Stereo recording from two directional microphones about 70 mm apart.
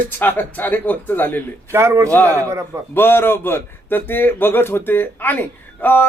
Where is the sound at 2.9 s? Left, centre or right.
Left.